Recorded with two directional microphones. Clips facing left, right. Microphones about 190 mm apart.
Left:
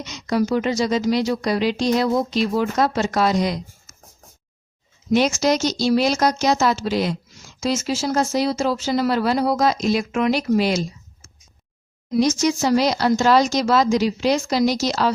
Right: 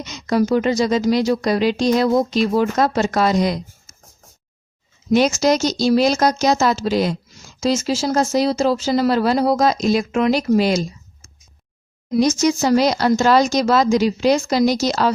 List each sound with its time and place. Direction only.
0.0 s speech: 45° right (ahead or behind)
5.1 s speech: 45° right (ahead or behind)
12.2 s speech: 45° right (ahead or behind)